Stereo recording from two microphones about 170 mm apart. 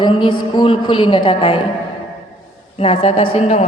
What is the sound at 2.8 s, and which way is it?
Speech, 35° left (ahead or behind).